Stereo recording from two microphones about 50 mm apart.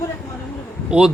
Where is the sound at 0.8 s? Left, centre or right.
Centre.